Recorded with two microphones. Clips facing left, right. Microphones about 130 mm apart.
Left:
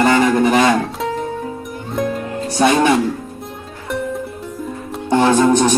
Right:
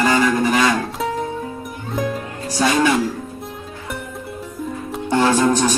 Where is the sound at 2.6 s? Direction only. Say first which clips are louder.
Left 3 dB; 25° left (ahead or behind).